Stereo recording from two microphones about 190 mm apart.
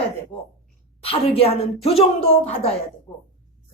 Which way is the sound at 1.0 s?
30° left (ahead or behind).